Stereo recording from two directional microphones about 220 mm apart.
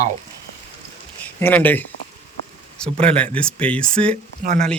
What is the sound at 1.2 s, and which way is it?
Speech, 10° left (ahead or behind).